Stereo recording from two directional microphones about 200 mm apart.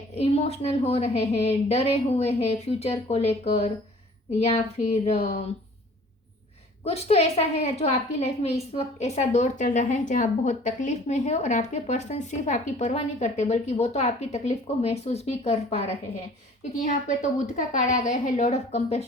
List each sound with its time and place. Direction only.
0.2 s a woman's voice: 30° left (ahead or behind)
6.8 s a woman's voice: 30° left (ahead or behind)